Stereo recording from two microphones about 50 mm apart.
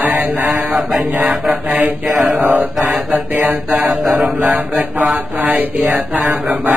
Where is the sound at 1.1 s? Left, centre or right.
Right.